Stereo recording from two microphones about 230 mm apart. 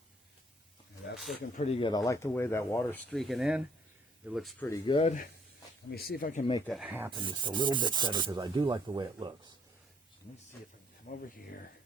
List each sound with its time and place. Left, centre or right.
1.1 s speech: centre
1.5 s speech: left; by 3.0 s centre
3.1 s speech: centre
4.6 s speech: centre
5.9 s speech: left
6.7 s speech: centre
7.1 s speech: right
11.1 s speech: left